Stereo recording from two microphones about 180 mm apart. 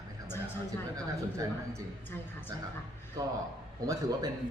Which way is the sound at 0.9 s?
15° right (ahead or behind).